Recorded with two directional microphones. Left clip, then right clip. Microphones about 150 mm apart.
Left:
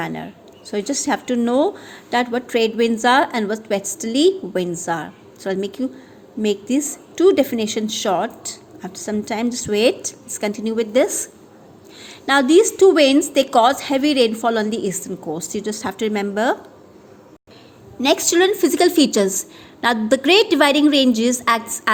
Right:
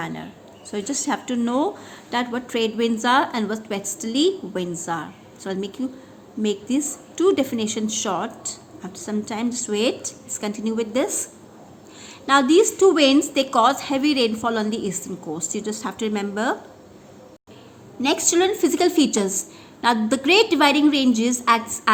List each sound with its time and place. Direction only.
0.0 s a woman's voice: 35° left (ahead or behind)
18.0 s a woman's voice: 40° left (ahead or behind)